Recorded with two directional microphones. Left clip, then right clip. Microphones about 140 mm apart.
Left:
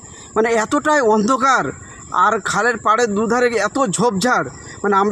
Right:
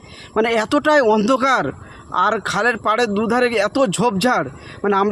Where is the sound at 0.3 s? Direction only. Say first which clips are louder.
Left 1 dB; 35° right (ahead or behind).